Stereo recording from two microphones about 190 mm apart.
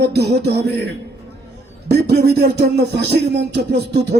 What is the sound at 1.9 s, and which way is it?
Music, 55° right (ahead or behind).